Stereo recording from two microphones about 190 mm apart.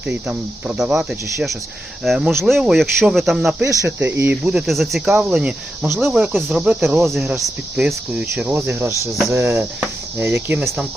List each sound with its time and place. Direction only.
0.0 s speech: 5° right (ahead or behind)
3.6 s speech: 15° right (ahead or behind)